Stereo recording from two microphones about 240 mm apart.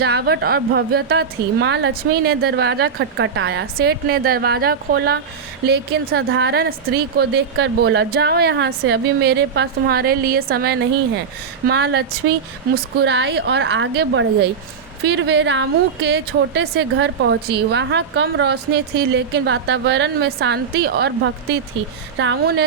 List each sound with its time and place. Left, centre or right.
0.0 s a woman's voice: right
22.2 s a woman's voice: right